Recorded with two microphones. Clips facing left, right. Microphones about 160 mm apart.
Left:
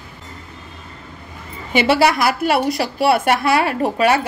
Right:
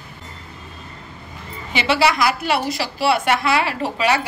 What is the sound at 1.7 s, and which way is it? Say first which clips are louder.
A woman's voice: left 4 dB; 50° left (ahead or behind).